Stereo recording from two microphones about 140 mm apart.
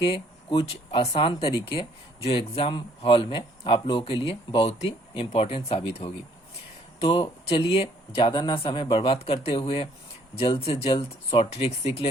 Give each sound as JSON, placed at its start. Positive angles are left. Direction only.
{"t": 0.0, "sound": "speech", "side_deg": 40}